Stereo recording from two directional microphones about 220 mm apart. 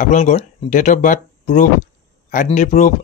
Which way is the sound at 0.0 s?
30° left (ahead or behind).